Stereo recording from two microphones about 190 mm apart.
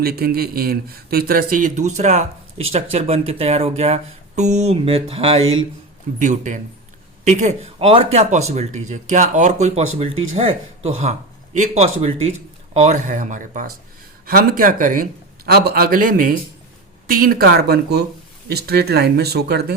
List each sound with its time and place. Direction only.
0.0 s a man's voice: 55° right (ahead or behind)
15.4 s a man's voice: 55° right (ahead or behind)